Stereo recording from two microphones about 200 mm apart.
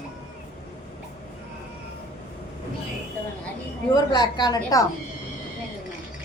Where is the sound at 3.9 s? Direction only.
20° left (ahead or behind).